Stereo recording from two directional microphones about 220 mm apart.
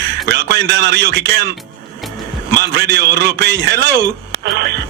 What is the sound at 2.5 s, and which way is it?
Speech, 50° right (ahead or behind).